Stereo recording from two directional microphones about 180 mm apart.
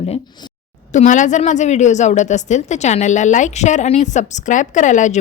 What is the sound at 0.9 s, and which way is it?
A woman's voice, 45° left (ahead or behind).